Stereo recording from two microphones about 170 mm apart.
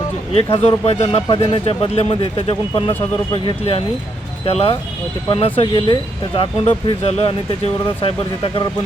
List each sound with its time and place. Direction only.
0.3 s speech: 35° left (ahead or behind)